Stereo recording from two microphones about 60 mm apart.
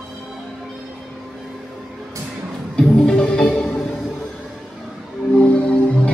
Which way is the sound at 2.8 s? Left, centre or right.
Centre.